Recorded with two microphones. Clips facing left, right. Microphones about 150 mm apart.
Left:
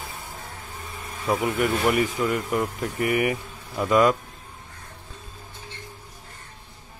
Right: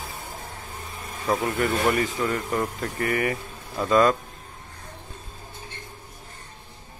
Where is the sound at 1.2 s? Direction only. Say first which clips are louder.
Left 1 dB; 10° left (ahead or behind).